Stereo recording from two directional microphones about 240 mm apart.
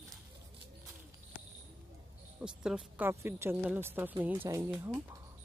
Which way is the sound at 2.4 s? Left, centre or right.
Centre.